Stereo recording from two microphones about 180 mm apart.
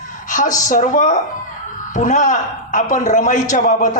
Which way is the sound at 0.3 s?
45° left (ahead or behind).